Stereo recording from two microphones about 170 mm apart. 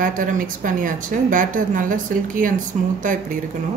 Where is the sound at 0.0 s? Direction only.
50° right (ahead or behind).